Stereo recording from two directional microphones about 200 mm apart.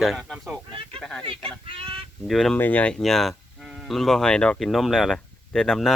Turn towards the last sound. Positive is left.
turn(degrees=0)  # may be behind; listen again after turning